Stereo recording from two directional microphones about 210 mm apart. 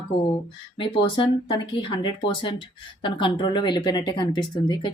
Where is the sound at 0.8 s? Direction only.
25° left (ahead or behind).